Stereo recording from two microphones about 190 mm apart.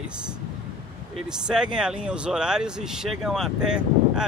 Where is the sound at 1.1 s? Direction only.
5° right (ahead or behind).